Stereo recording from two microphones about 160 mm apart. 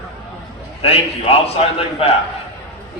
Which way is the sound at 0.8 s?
40° left (ahead or behind).